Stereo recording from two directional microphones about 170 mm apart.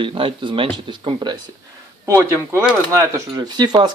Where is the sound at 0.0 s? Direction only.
30° right (ahead or behind).